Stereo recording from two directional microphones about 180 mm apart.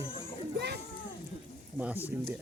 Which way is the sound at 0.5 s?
65° right (ahead or behind).